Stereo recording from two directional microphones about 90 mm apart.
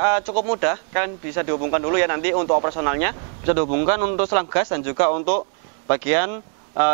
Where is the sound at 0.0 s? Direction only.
15° right (ahead or behind).